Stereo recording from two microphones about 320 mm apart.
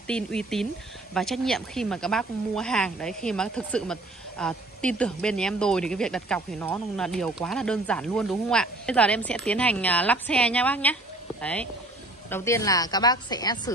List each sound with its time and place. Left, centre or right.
0.0 s a woman's voice: centre